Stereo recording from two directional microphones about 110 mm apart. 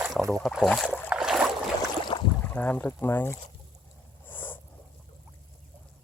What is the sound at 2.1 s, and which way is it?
Boat, 45° left (ahead or behind).